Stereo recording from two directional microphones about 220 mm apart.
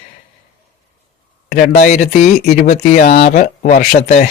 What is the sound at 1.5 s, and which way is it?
Speech, 35° left (ahead or behind).